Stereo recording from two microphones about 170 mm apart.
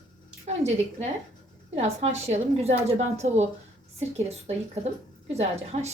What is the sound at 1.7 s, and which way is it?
A woman's voice, 40° right (ahead or behind).